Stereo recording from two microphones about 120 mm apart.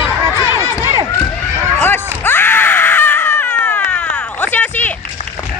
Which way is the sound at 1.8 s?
15° left (ahead or behind).